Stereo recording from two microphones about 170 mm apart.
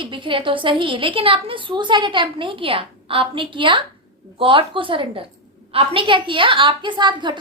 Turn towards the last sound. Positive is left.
turn(degrees=-25)  # may be behind; listen again after turning